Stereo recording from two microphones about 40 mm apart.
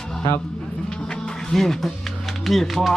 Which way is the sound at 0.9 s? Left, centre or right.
Centre.